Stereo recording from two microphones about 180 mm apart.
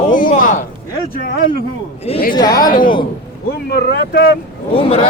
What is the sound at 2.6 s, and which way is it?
Speech, 50° left (ahead or behind).